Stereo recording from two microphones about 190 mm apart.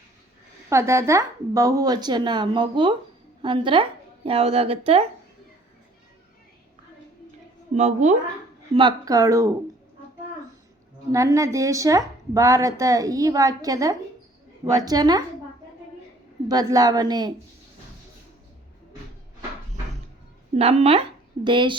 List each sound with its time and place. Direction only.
0.7 s a woman's voice: 15° right (ahead or behind); by 5.0 s 30° right (ahead or behind)
7.7 s speech: 35° right (ahead or behind)
8.7 s a woman's voice: 25° right (ahead or behind)
11.1 s a woman's voice: 15° right (ahead or behind)
16.5 s a woman's voice: 20° right (ahead or behind)
20.6 s a woman's voice: 30° right (ahead or behind)